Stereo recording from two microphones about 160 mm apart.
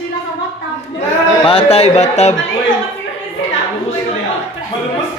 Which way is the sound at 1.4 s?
40° left (ahead or behind).